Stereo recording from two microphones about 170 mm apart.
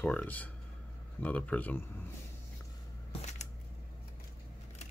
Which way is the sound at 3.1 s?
40° left (ahead or behind).